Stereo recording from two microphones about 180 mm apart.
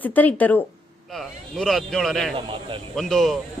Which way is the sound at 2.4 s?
30° right (ahead or behind).